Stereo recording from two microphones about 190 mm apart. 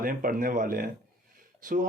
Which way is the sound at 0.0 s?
45° right (ahead or behind).